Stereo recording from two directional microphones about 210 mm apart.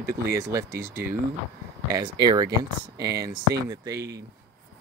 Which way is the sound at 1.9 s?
20° right (ahead or behind).